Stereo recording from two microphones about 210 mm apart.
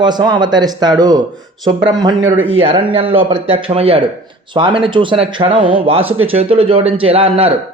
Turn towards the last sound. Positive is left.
turn(degrees=-25)  # may be behind; listen again after turning